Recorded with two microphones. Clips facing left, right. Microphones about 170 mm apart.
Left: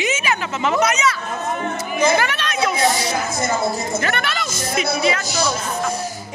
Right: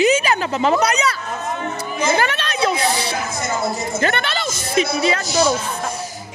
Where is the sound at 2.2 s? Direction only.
30° right (ahead or behind).